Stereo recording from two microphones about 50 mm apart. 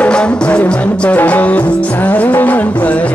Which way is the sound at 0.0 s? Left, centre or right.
Centre.